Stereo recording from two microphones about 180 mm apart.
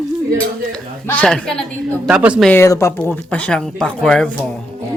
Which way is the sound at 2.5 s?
15° left (ahead or behind).